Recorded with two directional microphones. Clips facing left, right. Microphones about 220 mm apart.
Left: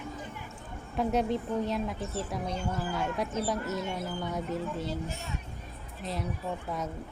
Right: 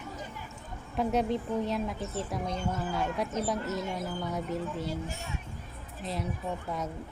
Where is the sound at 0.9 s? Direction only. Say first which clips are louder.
Even; centre (ahead or behind).